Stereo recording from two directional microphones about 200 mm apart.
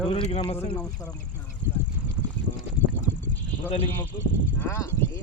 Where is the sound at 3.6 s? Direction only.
30° left (ahead or behind).